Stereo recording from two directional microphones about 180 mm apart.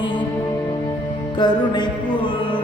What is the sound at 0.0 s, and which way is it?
Music, 25° left (ahead or behind).